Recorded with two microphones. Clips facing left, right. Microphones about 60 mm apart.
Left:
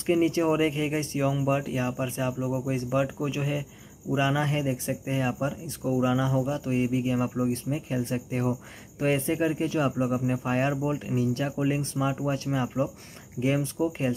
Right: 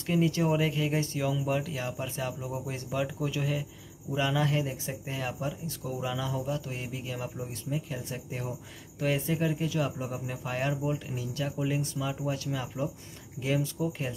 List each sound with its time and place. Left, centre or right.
0.0 s speech: left